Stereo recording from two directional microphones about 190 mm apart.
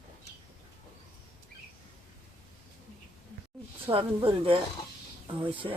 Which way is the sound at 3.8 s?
25° right (ahead or behind).